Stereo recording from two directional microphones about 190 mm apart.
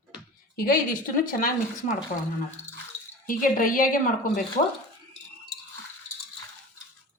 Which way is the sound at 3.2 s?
45° left (ahead or behind).